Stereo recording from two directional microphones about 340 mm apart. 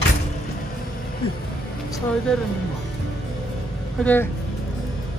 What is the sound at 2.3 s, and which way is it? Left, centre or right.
Speech, centre.